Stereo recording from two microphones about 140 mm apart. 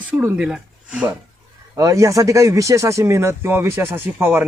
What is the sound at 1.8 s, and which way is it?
Speech, 25° right (ahead or behind).